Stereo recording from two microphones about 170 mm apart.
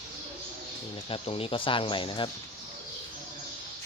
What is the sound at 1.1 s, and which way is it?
Speech, 35° left (ahead or behind).